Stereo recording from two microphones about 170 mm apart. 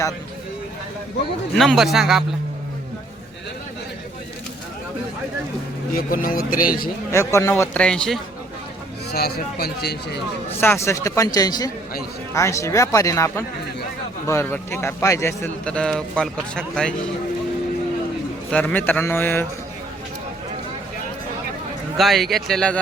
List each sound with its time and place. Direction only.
1.5 s speech: centre (ahead or behind)
5.9 s a man's voice: 60° left (ahead or behind)
7.3 s a man's voice: 15° left (ahead or behind)
9.1 s speech: 70° left (ahead or behind)
10.6 s a man's voice: 15° left (ahead or behind)
18.5 s a man's voice: 10° left (ahead or behind)
21.9 s speech: centre (ahead or behind)